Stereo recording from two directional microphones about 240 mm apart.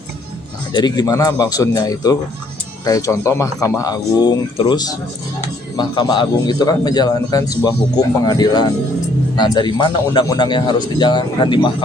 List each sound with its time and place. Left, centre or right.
0.7 s speech: centre